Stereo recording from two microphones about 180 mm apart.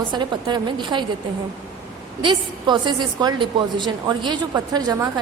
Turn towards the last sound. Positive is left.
turn(degrees=-20)  # may be behind; listen again after turning